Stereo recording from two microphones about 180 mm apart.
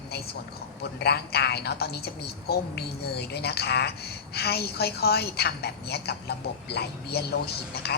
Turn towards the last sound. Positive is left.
turn(degrees=60)  # may be behind; listen again after turning